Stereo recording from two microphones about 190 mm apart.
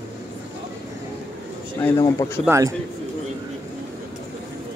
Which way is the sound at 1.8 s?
20° left (ahead or behind).